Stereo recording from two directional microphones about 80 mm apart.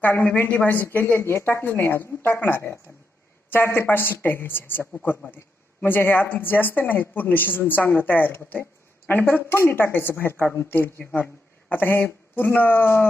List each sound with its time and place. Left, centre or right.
0.0 s a woman's voice: left